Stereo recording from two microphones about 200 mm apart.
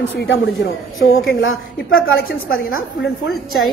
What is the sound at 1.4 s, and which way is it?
Speech, 75° left (ahead or behind).